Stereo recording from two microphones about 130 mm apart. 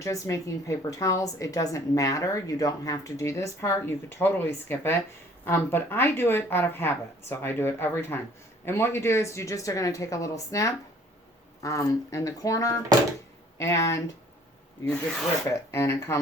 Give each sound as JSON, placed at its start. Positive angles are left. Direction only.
{"t": 0.0, "sound": "a woman's voice", "side_deg": 25}
{"t": 15.4, "sound": "a woman's voice", "side_deg": 20}